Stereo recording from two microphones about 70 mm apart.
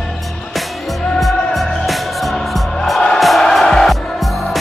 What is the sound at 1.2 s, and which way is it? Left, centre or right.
Music, centre.